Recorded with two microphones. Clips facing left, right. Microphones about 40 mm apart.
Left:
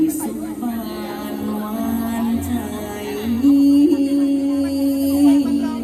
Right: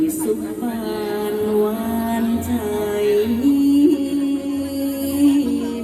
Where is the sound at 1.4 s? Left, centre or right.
Right.